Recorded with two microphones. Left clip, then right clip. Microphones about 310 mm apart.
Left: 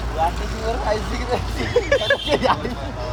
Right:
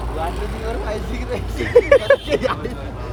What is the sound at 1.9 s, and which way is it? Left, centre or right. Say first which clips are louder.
Speech: right 4 dB; right.